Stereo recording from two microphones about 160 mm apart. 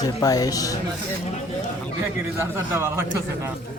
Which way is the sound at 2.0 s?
15° right (ahead or behind).